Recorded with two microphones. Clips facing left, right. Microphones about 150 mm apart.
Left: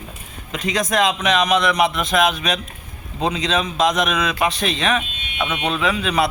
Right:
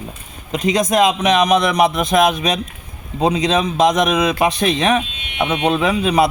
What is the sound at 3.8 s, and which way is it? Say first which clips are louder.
Speech: right 5 dB; 40° right (ahead or behind).